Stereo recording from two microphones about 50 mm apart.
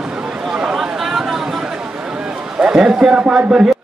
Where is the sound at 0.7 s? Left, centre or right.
Centre.